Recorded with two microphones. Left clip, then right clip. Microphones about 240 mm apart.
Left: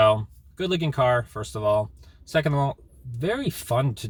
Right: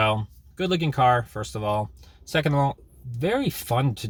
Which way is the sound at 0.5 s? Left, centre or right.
Centre.